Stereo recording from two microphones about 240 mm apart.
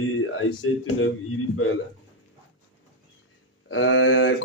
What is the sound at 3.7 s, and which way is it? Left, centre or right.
Speech, left.